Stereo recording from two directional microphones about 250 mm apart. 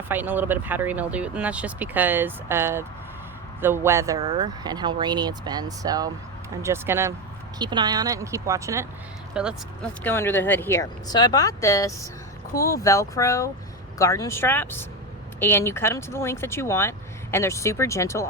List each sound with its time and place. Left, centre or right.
0.1 s speech: centre
10.0 s speech: centre